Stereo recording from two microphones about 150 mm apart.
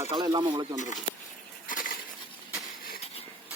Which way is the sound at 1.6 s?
65° left (ahead or behind).